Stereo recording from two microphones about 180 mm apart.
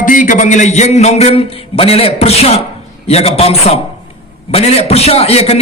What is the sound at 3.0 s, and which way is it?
Mantra, 35° left (ahead or behind).